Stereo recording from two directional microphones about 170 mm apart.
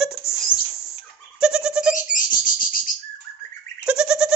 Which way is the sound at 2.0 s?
55° left (ahead or behind).